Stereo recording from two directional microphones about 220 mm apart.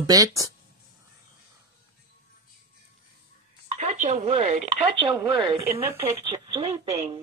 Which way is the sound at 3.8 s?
30° right (ahead or behind).